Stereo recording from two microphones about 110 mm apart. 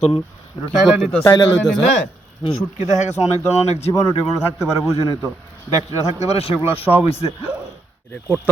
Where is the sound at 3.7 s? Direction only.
75° left (ahead or behind).